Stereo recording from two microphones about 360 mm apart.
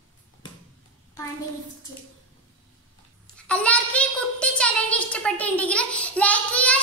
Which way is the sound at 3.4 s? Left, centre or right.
Centre.